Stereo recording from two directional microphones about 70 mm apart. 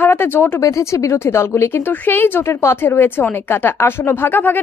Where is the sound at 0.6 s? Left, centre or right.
Left.